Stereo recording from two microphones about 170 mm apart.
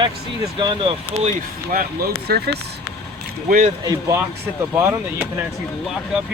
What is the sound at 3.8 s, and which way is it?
Speech, 20° right (ahead or behind).